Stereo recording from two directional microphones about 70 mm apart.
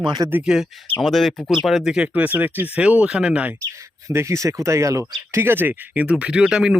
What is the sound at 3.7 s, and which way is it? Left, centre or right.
Speech, right.